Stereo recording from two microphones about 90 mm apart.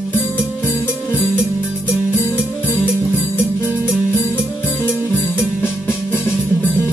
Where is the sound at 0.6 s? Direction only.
25° left (ahead or behind).